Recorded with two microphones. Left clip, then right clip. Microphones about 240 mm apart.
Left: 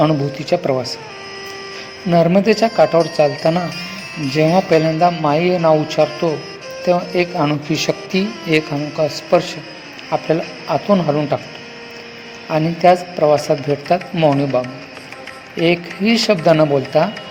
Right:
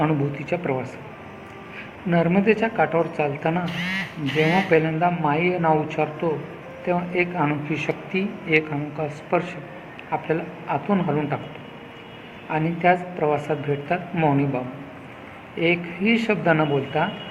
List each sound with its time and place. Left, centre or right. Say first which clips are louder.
0.0 s speech: left 7 dB; left
2.0 s speech: left 7 dB; left
10.1 s speech: left 7 dB; left
12.5 s speech: left 7 dB; left
15.5 s speech: left 6 dB; left